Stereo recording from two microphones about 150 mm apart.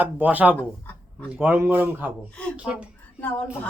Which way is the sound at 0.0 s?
10° right (ahead or behind).